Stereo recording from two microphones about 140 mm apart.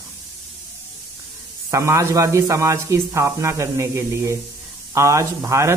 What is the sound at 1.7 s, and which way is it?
Speech, 20° right (ahead or behind).